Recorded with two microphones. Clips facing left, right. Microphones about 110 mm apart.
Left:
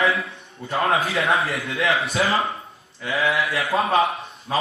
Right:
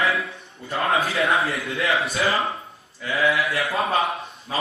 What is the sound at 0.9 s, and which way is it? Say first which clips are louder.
A man's voice: even; centre (ahead or behind).